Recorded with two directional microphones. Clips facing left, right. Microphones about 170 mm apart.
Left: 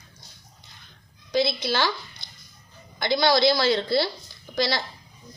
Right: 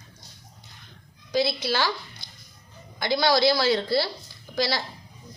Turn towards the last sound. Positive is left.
turn(degrees=-10)  # may be behind; listen again after turning